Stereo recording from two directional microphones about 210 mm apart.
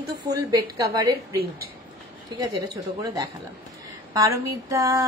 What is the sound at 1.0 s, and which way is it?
Speech, 15° right (ahead or behind).